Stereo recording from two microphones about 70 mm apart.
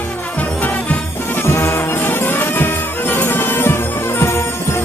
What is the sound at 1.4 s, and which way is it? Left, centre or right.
Music, left.